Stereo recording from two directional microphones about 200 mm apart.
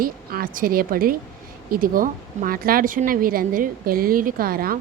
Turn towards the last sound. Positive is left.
turn(degrees=-45)  # may be behind; listen again after turning